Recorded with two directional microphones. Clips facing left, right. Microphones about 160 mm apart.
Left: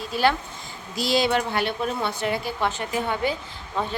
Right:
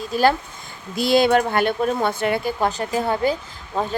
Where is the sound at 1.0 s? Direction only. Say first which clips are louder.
Right 6 dB; 55° right (ahead or behind).